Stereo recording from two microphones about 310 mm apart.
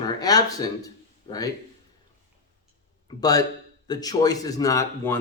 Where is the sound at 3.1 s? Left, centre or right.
Centre.